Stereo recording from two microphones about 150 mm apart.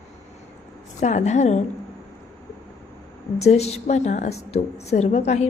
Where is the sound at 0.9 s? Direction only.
50° left (ahead or behind).